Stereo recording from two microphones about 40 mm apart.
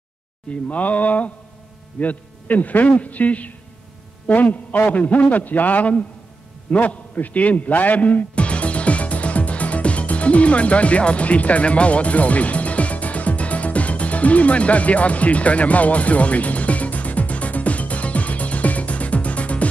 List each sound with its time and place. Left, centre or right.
0.5 s a man's voice: left
6.7 s music: left